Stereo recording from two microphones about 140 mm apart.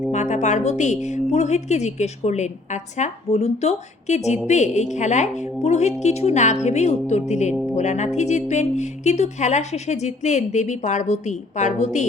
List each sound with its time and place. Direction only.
0.1 s a woman's voice: 55° left (ahead or behind)